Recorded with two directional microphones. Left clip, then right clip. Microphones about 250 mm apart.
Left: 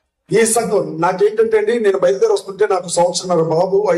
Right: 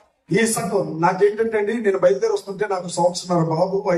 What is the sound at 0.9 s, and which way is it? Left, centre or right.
Speech, left.